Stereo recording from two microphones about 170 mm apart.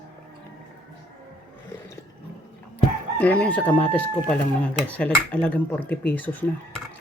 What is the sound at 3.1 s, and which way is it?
Speech, 10° left (ahead or behind).